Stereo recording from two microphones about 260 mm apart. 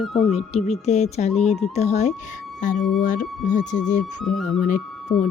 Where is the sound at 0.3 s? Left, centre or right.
Left.